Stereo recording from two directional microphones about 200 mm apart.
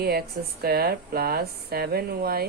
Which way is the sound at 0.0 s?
50° right (ahead or behind).